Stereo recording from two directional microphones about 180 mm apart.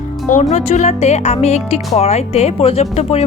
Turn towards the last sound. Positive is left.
turn(degrees=35)  # may be behind; listen again after turning